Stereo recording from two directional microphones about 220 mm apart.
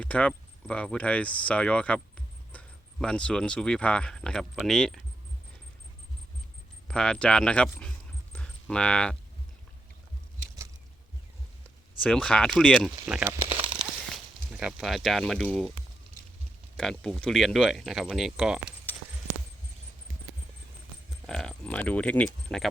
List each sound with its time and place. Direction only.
0.0 s speech: 5° left (ahead or behind)
6.8 s speech: 5° left (ahead or behind)
12.0 s speech: 5° left (ahead or behind)
13.4 s a sound: 25° right (ahead or behind)
14.5 s speech: 5° right (ahead or behind)
16.7 s speech: centre (ahead or behind)
21.2 s speech: 5° left (ahead or behind)